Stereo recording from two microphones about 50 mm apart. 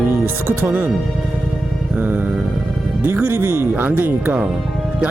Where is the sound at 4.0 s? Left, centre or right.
Right.